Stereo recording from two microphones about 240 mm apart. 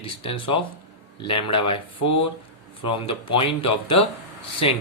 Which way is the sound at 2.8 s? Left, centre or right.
Left.